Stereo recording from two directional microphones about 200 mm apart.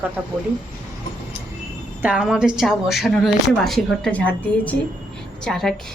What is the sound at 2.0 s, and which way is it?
A woman's voice, 5° right (ahead or behind).